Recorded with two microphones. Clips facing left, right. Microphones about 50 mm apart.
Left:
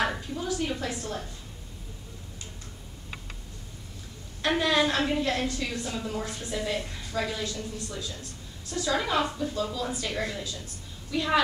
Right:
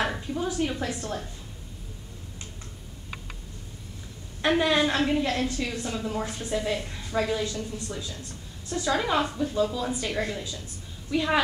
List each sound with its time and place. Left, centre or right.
0.0 s a sound: centre
0.4 s a woman's voice: centre
4.5 s a woman's voice: centre
5.3 s a woman's voice: centre
5.6 s a woman's voice: centre
8.2 s a woman's voice: right
8.9 s a woman's voice: centre